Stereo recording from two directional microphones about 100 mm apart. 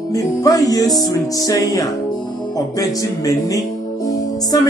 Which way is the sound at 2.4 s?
40° left (ahead or behind).